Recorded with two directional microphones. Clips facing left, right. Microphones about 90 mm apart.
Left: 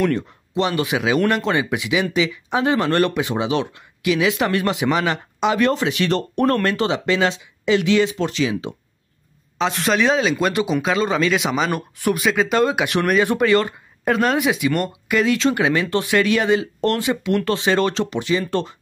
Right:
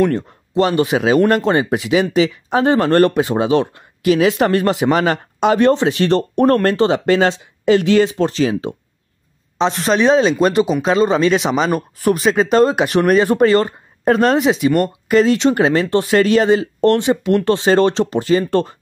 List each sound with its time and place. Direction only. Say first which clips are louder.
0.1 s speech: right 3 dB; 35° right (ahead or behind)
9.6 s speech: right 4 dB; 25° right (ahead or behind); by 18.8 s 40° right (ahead or behind)